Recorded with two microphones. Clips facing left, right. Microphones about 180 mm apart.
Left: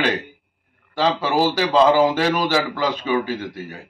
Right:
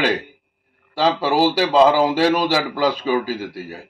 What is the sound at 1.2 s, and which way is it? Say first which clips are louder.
A man's voice: right 2 dB; 30° right (ahead or behind).